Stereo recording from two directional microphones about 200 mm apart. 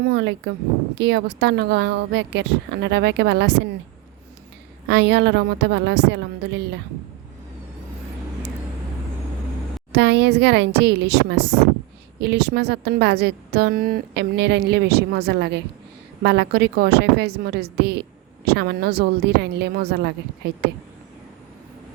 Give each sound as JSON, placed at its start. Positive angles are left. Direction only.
{"t": 0.0, "sound": "a woman's voice", "side_deg": -60}
{"t": 4.9, "sound": "a woman's voice", "side_deg": -60}
{"t": 9.9, "sound": "a woman's voice", "side_deg": -60}